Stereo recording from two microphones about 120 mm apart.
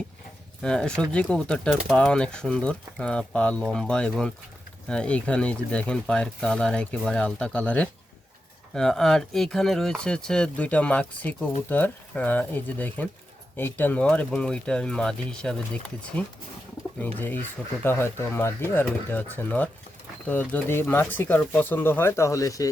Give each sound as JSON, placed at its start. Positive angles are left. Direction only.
{"t": 0.6, "sound": "speech", "side_deg": 5}